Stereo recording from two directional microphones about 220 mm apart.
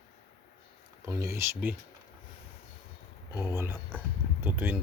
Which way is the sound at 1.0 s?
15° right (ahead or behind).